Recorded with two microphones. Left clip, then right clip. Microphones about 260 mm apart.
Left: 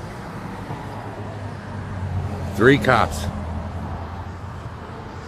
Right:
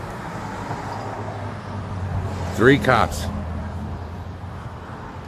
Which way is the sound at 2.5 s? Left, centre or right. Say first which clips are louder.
Even; centre.